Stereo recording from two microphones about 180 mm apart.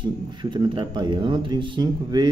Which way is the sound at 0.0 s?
25° right (ahead or behind).